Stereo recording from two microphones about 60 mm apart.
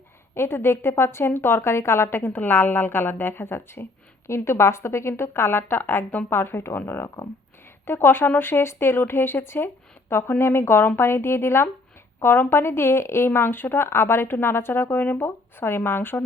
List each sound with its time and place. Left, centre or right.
0.3 s a woman's voice: left